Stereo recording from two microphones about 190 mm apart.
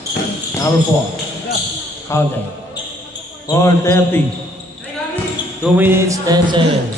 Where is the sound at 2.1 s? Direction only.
15° left (ahead or behind).